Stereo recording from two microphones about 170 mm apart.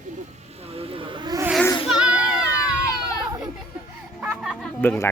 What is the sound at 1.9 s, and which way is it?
Children playing, 5° right (ahead or behind).